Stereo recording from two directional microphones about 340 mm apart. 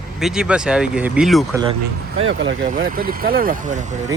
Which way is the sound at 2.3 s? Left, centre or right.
Right.